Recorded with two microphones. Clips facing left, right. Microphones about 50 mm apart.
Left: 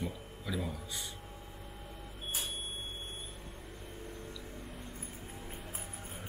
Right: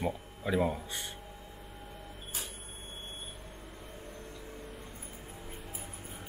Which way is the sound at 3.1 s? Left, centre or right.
Right.